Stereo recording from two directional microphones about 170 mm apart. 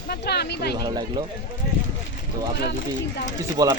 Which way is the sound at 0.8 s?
25° right (ahead or behind).